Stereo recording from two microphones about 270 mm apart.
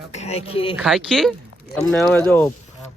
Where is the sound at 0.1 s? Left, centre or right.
Left.